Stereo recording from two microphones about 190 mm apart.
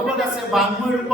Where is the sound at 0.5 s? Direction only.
Centre (ahead or behind).